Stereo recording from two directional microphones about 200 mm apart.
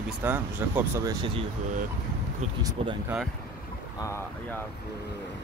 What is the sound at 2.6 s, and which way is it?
Speech, 20° right (ahead or behind).